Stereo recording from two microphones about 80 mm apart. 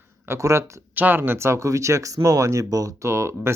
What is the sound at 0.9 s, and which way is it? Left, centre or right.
Speech, right.